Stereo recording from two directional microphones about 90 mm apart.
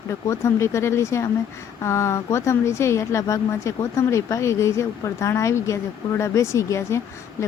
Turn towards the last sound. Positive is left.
turn(degrees=30)  # may be behind; listen again after turning